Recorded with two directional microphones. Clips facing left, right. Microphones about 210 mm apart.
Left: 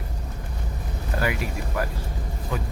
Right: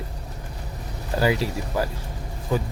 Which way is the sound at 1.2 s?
30° right (ahead or behind).